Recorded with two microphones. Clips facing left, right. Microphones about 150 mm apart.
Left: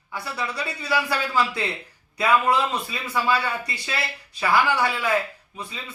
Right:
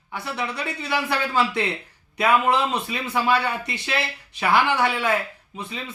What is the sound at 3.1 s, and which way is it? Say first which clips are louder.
Speech: right 1 dB; 25° right (ahead or behind).